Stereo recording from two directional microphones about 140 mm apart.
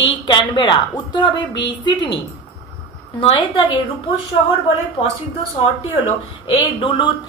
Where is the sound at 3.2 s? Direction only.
40° left (ahead or behind).